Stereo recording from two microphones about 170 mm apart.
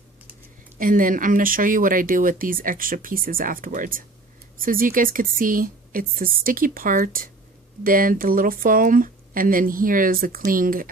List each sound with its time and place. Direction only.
0.8 s speech: 55° right (ahead or behind)